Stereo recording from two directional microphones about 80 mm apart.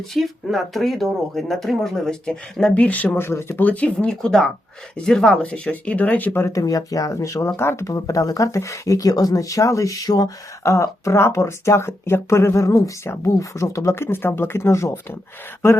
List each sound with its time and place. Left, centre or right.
0.1 s speech: centre
2.8 s speech: centre
6.4 s speech: left
7.9 s speech: left